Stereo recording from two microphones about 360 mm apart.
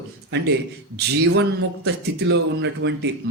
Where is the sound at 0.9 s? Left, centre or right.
Right.